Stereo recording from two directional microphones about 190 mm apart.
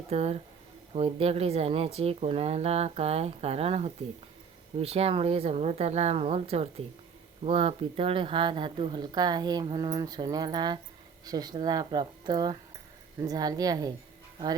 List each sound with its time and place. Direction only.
0.1 s a woman's voice: 35° right (ahead or behind)